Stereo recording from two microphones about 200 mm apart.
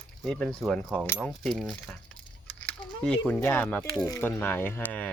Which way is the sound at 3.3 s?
10° left (ahead or behind).